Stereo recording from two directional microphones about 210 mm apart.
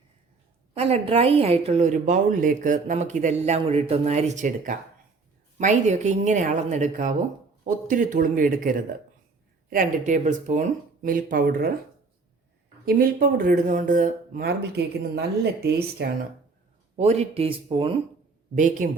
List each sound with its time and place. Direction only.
0.7 s a woman's voice: 30° right (ahead or behind); by 11.7 s 45° right (ahead or behind)
12.8 s speech: 45° right (ahead or behind)
17.0 s speech: 30° right (ahead or behind)
18.5 s a woman's voice: 35° right (ahead or behind)